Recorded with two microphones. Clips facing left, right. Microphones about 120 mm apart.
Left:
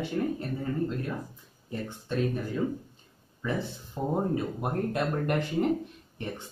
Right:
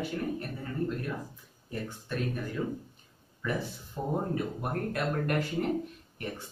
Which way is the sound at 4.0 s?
15° left (ahead or behind).